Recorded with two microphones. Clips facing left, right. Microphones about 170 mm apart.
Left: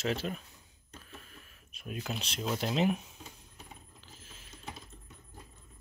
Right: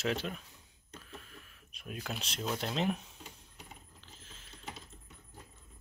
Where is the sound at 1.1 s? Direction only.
Centre (ahead or behind).